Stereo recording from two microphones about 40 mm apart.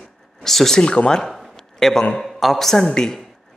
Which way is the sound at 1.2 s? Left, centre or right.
Centre.